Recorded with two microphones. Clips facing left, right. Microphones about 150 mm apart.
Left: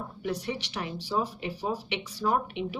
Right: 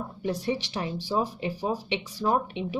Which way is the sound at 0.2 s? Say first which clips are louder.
Right 4 dB; 25° right (ahead or behind).